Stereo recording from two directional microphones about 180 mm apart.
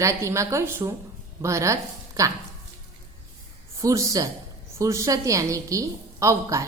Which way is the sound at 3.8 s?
20° right (ahead or behind).